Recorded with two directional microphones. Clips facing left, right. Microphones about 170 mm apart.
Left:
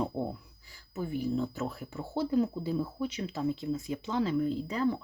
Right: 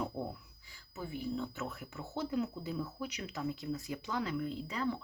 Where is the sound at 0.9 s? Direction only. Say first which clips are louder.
Left 7 dB; 45° left (ahead or behind).